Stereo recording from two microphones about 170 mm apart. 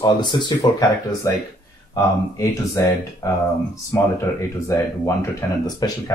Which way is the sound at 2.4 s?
20° left (ahead or behind).